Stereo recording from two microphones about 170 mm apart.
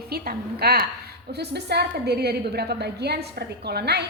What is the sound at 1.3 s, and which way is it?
A woman's voice, 75° right (ahead or behind).